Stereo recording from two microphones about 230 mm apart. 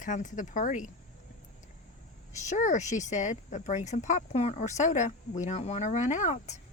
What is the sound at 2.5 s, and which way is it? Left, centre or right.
Speech, left.